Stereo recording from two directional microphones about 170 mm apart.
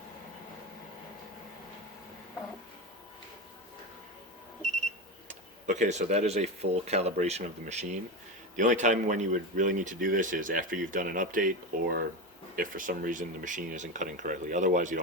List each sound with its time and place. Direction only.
5.3 s speech: 45° right (ahead or behind)